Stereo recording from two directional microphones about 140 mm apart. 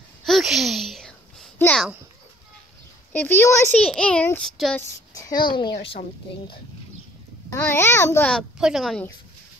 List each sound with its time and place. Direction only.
0.2 s a sound: centre (ahead or behind)
3.1 s a child's voice: 15° left (ahead or behind)
3.7 s a child's voice: 10° left (ahead or behind)
4.7 s a woman's voice: 25° left (ahead or behind)
7.5 s a child's voice: 15° left (ahead or behind)
8.3 s a woman's voice: centre (ahead or behind)